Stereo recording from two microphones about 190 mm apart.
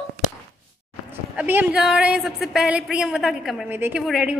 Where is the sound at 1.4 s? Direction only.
10° right (ahead or behind).